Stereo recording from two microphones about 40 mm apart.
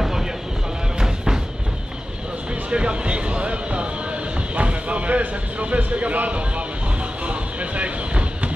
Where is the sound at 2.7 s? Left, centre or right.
Right.